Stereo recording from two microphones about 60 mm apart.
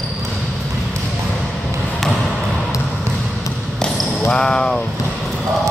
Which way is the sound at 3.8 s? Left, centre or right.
Centre.